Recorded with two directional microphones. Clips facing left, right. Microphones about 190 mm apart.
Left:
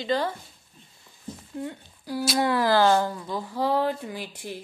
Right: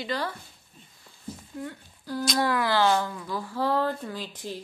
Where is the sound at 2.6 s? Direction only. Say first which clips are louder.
Left 3 dB; 45° left (ahead or behind).